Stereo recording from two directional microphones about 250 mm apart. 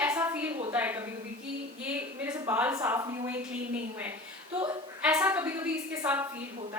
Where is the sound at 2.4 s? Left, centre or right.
Centre.